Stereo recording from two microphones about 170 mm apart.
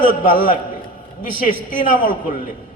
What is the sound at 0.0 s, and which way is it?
A man's voice, 55° left (ahead or behind).